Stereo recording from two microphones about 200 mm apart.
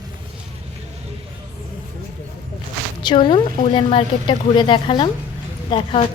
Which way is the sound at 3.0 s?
25° left (ahead or behind).